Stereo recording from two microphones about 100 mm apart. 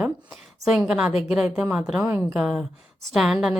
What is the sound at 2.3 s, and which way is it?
Speech, 5° right (ahead or behind).